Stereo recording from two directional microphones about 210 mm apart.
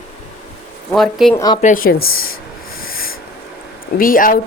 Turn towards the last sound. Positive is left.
turn(degrees=40)  # may be behind; listen again after turning